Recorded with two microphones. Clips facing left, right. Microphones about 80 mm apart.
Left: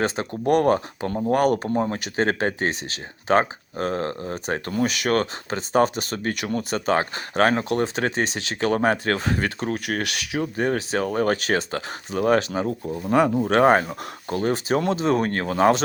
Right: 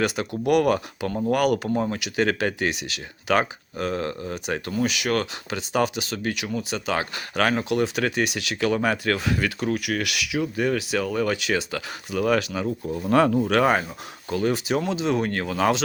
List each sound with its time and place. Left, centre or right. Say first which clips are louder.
0.0 s speech: even; left
12.8 s speech: right 1 dB; centre
13.4 s speech: left 3 dB; left